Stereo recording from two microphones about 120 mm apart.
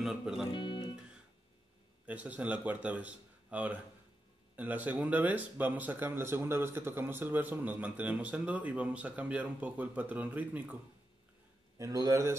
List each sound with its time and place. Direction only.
0.0 s speech: 5° right (ahead or behind)
0.5 s speech: 40° left (ahead or behind)
2.0 s speech: 10° right (ahead or behind)
11.8 s speech: 30° right (ahead or behind)